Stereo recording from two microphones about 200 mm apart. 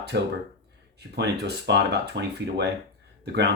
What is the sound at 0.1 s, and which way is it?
Speech, 55° right (ahead or behind).